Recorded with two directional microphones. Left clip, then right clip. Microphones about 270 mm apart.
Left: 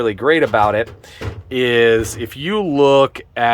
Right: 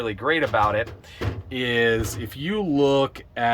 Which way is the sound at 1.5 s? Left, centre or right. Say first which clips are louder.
Left 8 dB; centre.